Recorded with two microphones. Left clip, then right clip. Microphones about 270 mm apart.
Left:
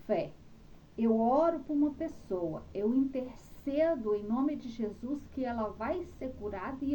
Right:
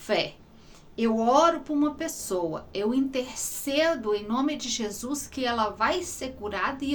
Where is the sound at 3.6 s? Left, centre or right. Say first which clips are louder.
Right 5 dB; centre.